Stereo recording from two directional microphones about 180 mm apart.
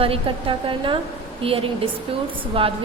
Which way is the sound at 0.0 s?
30° right (ahead or behind).